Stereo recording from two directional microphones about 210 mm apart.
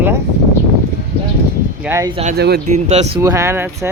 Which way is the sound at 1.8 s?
15° right (ahead or behind).